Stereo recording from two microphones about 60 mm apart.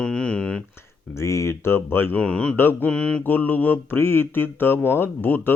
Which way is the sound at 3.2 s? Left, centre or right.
Left.